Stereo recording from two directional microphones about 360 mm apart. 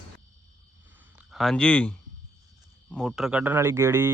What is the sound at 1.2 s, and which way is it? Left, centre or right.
A man's voice, centre.